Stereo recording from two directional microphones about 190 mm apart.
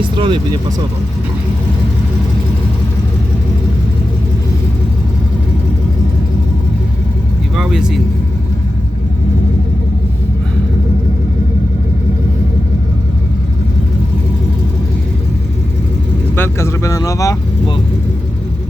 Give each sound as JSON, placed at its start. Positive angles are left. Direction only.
{"t": 0.0, "sound": "speech", "side_deg": -25}
{"t": 7.5, "sound": "speech", "side_deg": 0}
{"t": 16.3, "sound": "speech", "side_deg": 10}